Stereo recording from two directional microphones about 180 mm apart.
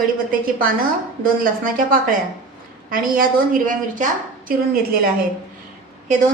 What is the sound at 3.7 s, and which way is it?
A woman's voice, 45° right (ahead or behind).